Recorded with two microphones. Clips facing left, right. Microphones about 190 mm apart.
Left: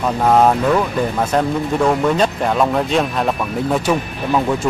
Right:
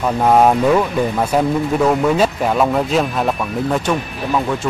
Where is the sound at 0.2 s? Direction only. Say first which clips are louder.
Right 1 dB; 5° right (ahead or behind).